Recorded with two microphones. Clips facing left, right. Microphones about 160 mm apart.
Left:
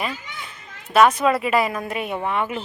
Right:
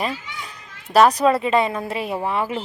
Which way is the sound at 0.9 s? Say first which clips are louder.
Right 1 dB; 35° right (ahead or behind).